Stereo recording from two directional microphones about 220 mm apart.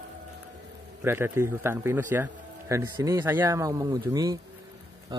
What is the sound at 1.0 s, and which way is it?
Speech, 10° right (ahead or behind).